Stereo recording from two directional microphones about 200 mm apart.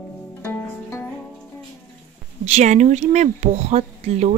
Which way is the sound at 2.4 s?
35° right (ahead or behind).